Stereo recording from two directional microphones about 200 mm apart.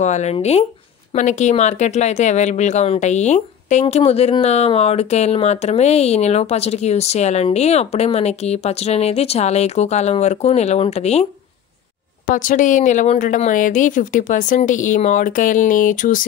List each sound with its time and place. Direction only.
0.0 s speech: 35° left (ahead or behind)
12.3 s speech: 40° left (ahead or behind)